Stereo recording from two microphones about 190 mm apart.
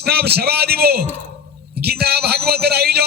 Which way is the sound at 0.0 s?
55° right (ahead or behind).